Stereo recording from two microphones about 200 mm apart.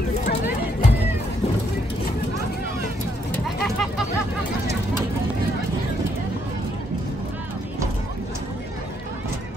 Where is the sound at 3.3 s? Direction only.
Centre (ahead or behind).